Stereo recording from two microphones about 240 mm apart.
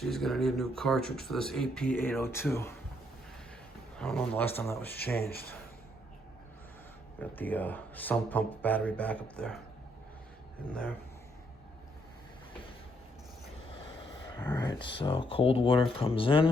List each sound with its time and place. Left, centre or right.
0.0 s speech: centre
3.9 s speech: centre
5.1 s speech: left
7.2 s speech: centre
14.5 s speech: centre